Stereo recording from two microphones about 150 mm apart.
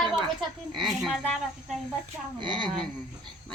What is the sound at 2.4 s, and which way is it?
Speech, 30° right (ahead or behind).